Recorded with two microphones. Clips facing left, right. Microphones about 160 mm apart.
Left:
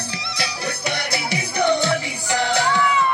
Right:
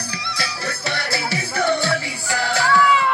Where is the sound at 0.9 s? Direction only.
20° left (ahead or behind).